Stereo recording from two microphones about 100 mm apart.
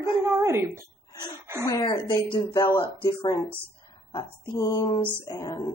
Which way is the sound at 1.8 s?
55° left (ahead or behind).